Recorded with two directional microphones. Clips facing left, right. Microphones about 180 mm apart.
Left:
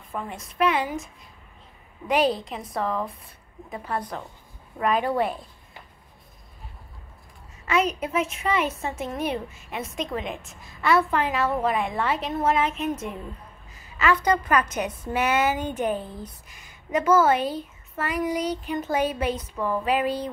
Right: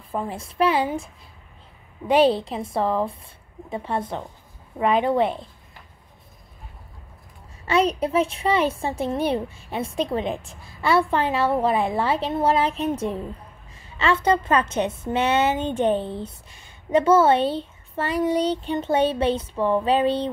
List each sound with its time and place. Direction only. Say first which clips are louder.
0.1 s a woman's voice: right 5 dB; 30° right (ahead or behind)
7.6 s a woman's voice: right 4 dB; 30° right (ahead or behind)